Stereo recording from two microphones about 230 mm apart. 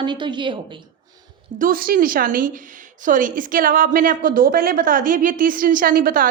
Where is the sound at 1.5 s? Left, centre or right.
Right.